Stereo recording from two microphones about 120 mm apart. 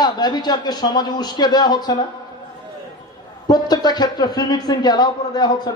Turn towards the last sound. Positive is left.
turn(degrees=35)  # may be behind; listen again after turning